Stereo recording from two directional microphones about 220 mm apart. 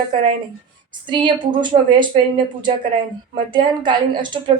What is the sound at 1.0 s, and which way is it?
A woman's voice, 20° right (ahead or behind).